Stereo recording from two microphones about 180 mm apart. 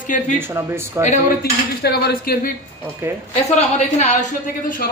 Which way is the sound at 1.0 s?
15° right (ahead or behind).